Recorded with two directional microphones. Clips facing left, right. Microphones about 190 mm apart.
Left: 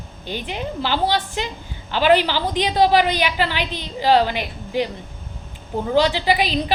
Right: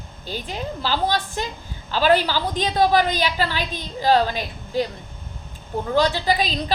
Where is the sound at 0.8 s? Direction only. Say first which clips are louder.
Left 2 dB; 20° left (ahead or behind).